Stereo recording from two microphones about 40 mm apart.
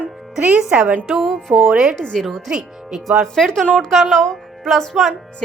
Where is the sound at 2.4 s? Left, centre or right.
Centre.